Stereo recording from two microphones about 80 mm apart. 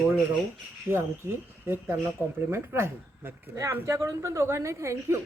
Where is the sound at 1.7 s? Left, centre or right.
Right.